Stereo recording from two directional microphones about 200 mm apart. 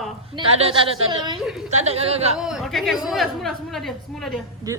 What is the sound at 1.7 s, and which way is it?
Speech, 35° right (ahead or behind).